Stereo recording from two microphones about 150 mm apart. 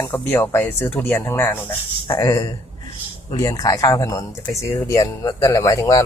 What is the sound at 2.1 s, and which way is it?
Speech, 25° left (ahead or behind).